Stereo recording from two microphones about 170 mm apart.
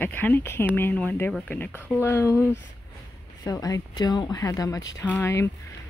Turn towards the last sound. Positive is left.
turn(degrees=15)  # may be behind; listen again after turning